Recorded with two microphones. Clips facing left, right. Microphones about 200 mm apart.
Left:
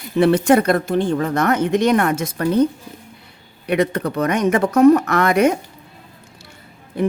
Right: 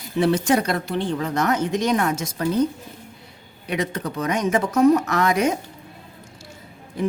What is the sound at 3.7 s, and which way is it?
Speech, 60° left (ahead or behind).